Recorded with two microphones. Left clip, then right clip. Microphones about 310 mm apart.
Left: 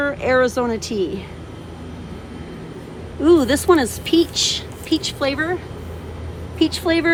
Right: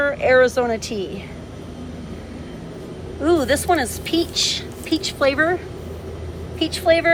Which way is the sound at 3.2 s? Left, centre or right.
Centre.